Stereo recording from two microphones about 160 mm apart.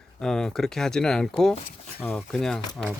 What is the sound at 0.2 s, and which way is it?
Speech, 5° left (ahead or behind).